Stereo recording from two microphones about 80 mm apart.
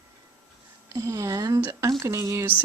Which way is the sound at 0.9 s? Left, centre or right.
Right.